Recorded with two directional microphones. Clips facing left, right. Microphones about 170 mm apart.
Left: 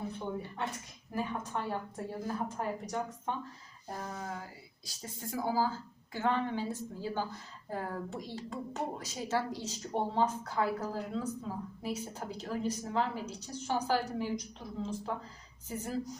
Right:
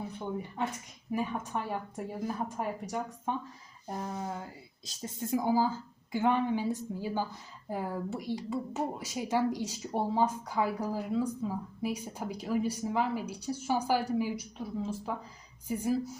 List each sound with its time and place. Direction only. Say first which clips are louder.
1.1 s speech: right 3 dB; 15° right (ahead or behind)